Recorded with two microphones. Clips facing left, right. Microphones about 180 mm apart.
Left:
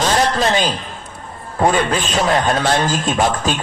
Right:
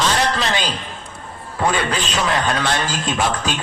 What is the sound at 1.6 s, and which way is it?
A man's voice, 45° left (ahead or behind).